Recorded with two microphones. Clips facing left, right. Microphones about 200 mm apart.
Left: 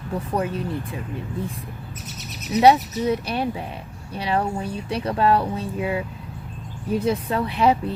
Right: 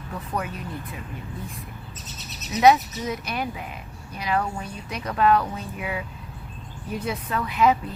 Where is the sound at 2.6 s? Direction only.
30° left (ahead or behind).